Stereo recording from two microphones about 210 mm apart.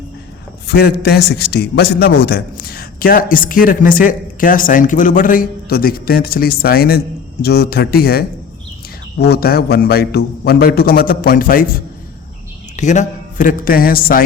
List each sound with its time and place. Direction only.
0.7 s a man's voice: 45° left (ahead or behind)
12.7 s speech: 35° left (ahead or behind)